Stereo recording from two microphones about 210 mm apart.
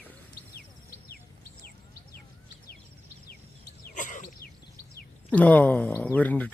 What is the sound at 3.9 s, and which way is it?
Sneeze, 40° left (ahead or behind).